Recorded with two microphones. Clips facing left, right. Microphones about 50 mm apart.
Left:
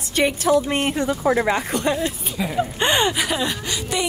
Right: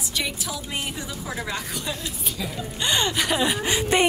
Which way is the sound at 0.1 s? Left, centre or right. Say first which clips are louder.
Left 13 dB; left.